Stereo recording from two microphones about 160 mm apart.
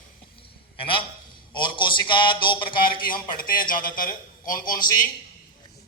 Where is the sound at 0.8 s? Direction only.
35° left (ahead or behind).